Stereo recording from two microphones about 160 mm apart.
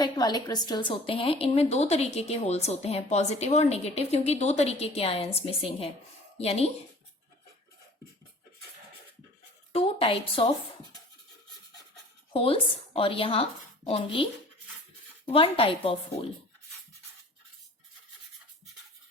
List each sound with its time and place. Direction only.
0.0 s speech: 25° left (ahead or behind)
9.7 s speech: 35° left (ahead or behind)
12.3 s speech: 35° left (ahead or behind)
15.3 s speech: 35° left (ahead or behind)